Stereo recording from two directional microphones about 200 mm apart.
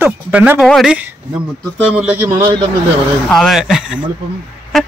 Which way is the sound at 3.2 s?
Centre (ahead or behind).